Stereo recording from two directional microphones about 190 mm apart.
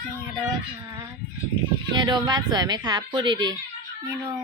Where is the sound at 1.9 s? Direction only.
20° right (ahead or behind).